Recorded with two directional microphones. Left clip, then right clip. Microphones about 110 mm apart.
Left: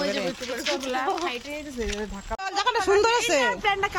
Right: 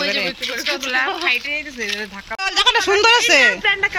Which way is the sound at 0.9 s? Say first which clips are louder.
Right 9 dB; 20° left (ahead or behind).